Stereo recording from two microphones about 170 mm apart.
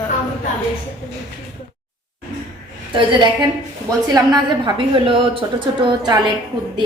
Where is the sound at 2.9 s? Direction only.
25° right (ahead or behind).